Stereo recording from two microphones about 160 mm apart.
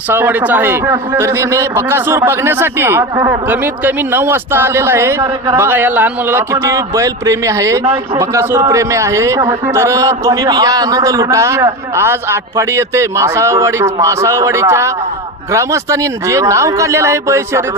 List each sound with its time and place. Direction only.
0.1 s a man's voice: 10° right (ahead or behind)